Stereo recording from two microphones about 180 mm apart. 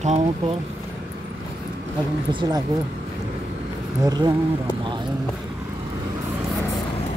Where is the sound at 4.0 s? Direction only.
20° right (ahead or behind).